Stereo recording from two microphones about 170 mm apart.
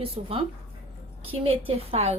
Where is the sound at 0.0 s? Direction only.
35° right (ahead or behind).